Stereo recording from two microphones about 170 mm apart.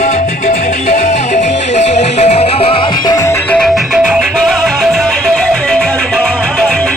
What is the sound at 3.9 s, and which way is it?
Music, 5° right (ahead or behind).